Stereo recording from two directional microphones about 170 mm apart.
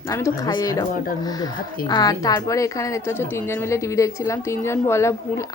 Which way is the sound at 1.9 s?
20° left (ahead or behind).